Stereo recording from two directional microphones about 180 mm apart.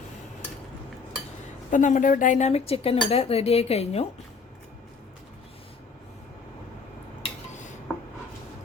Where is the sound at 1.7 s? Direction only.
45° left (ahead or behind).